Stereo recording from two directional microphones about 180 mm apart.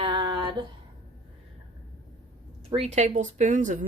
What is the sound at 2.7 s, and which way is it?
Speech, 35° right (ahead or behind).